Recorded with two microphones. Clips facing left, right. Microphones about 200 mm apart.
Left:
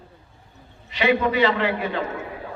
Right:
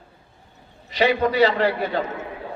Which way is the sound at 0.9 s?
40° right (ahead or behind).